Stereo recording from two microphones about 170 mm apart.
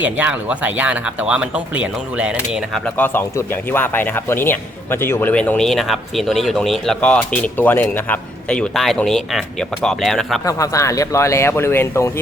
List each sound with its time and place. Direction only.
0.0 s speech: 10° right (ahead or behind)
3.0 s speech: 10° left (ahead or behind)
10.4 s speech: 20° left (ahead or behind)